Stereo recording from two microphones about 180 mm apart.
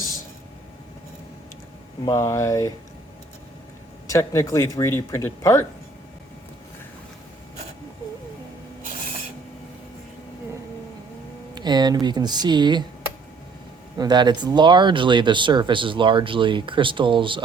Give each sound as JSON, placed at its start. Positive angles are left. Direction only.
{"t": 2.0, "sound": "speech", "side_deg": 15}
{"t": 4.0, "sound": "speech", "side_deg": 15}
{"t": 11.5, "sound": "speech", "side_deg": -25}
{"t": 14.0, "sound": "speech", "side_deg": -25}